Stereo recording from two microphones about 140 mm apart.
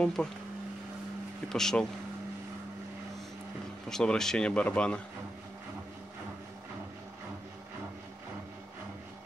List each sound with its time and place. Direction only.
0.0 s speech: 5° left (ahead or behind)
1.5 s speech: 5° left (ahead or behind)
3.9 s speech: 5° left (ahead or behind)